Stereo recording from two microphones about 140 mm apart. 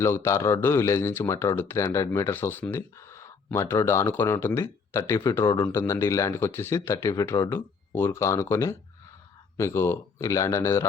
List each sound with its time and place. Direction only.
0.0 s speech: 20° left (ahead or behind)